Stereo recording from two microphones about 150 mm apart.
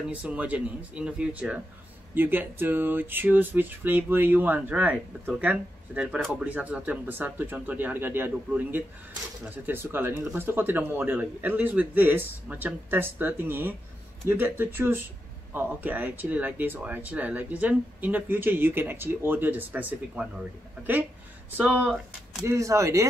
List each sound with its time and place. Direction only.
0.1 s speech: 10° right (ahead or behind)
21.5 s speech: 10° right (ahead or behind)
22.4 s speech: 20° right (ahead or behind)